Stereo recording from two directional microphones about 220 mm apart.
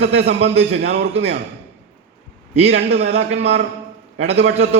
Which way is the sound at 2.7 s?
50° right (ahead or behind).